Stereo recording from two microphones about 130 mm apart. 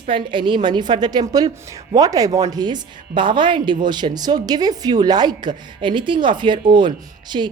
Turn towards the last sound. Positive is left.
turn(degrees=-35)  # may be behind; listen again after turning